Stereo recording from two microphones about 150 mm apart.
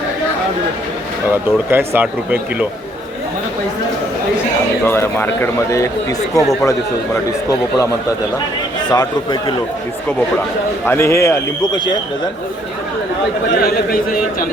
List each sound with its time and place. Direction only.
1.7 s speech: 15° right (ahead or behind)
4.9 s a man's voice: 15° left (ahead or behind)
8.9 s a man's voice: 25° left (ahead or behind)
10.8 s a man's voice: 20° left (ahead or behind)
13.6 s a man's voice: 75° left (ahead or behind)